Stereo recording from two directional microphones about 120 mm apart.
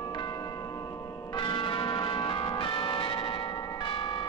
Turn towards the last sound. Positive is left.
turn(degrees=45)  # may be behind; listen again after turning